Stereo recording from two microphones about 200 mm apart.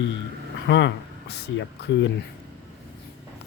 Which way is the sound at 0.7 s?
60° left (ahead or behind).